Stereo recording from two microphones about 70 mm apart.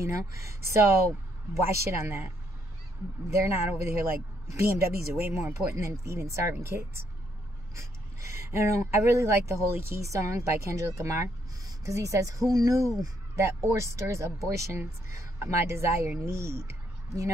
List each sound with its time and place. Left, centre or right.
0.0 s speech: right
3.3 s speech: right
13.4 s speech: right